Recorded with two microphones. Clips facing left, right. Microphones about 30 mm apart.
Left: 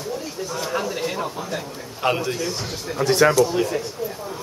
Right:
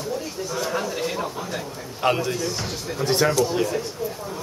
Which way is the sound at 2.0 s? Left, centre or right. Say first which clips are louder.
Even; centre.